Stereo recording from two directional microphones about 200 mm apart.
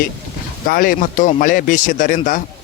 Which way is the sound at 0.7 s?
45° left (ahead or behind).